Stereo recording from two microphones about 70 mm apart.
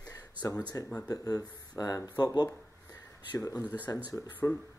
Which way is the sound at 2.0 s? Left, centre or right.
Left.